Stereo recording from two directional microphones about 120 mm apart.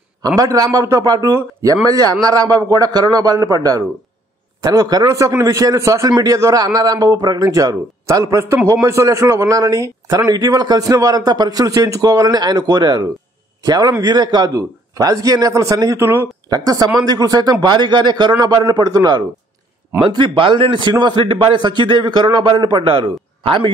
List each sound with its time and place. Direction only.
0.4 s a man's voice: 30° right (ahead or behind)
16.4 s a man's voice: 30° right (ahead or behind); by 23.7 s 45° right (ahead or behind)